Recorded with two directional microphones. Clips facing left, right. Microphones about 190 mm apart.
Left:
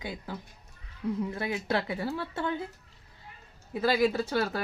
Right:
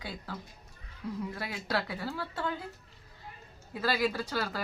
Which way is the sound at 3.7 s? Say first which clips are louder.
Left 5 dB; 20° left (ahead or behind).